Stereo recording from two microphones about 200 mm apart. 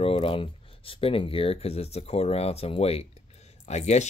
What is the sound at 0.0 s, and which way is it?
Speech, 25° left (ahead or behind).